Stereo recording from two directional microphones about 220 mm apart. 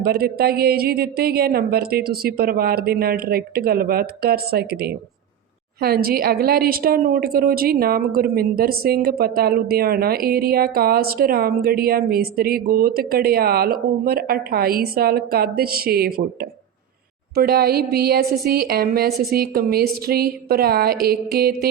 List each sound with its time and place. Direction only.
0.0 s a woman's voice: 45° right (ahead or behind)